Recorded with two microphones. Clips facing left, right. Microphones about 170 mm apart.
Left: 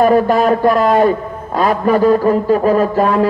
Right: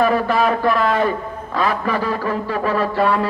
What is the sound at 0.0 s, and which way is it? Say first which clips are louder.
A man's voice: left 5 dB; 45° left (ahead or behind).